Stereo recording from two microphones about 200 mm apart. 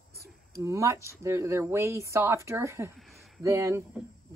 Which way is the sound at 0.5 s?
15° right (ahead or behind).